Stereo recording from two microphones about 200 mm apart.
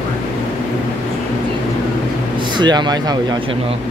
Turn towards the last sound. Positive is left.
turn(degrees=-20)  # may be behind; listen again after turning